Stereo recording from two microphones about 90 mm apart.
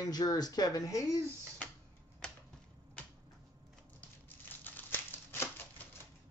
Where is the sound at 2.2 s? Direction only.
10° left (ahead or behind).